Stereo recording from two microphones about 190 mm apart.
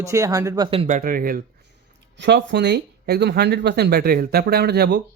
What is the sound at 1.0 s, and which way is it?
Speech, 50° right (ahead or behind).